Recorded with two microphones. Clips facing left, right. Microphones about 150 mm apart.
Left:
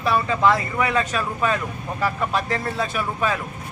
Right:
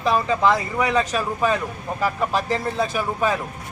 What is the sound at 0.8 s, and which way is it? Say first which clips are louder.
A man's voice: right 3 dB; centre (ahead or behind).